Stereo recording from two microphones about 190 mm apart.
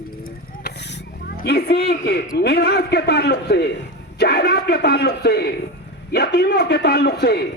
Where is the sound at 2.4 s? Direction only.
60° left (ahead or behind).